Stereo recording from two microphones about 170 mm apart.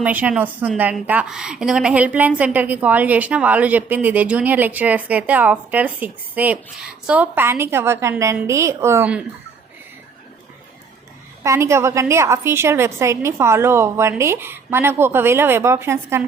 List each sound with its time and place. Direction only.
0.0 s a woman's voice: 10° right (ahead or behind)
11.4 s a woman's voice: 15° right (ahead or behind)